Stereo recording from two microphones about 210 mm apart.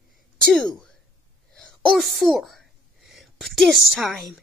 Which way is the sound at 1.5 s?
5° left (ahead or behind).